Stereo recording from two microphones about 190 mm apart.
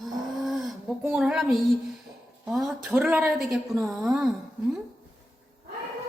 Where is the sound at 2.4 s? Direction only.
Centre (ahead or behind).